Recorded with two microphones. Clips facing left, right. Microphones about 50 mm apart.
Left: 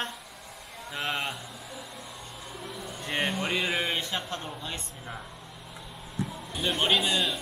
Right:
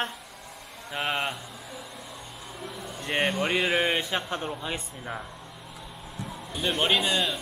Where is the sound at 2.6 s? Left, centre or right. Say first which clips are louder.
Right 2 dB; centre.